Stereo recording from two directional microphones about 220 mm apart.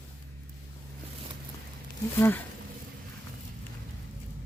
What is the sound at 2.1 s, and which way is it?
Speech, 10° left (ahead or behind).